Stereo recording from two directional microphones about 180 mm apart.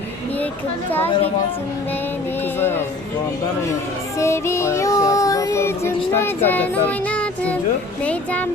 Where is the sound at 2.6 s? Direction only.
10° left (ahead or behind).